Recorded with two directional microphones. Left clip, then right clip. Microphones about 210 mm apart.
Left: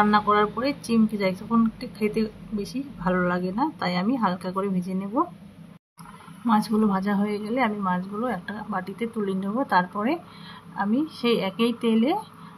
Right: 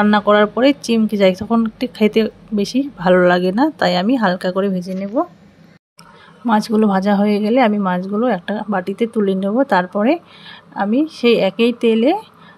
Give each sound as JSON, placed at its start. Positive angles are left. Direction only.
{"t": 0.0, "sound": "speech", "side_deg": -35}
{"t": 6.4, "sound": "speech", "side_deg": -35}